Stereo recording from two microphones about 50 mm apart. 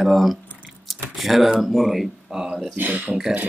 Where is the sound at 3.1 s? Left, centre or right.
Right.